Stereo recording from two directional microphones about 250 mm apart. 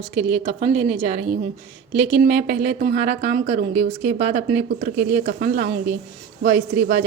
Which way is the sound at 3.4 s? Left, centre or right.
Right.